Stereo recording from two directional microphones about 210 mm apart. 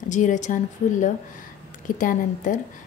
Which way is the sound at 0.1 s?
35° left (ahead or behind).